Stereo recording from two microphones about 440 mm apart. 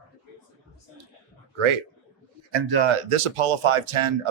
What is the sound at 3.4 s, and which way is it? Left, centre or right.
Speech, right.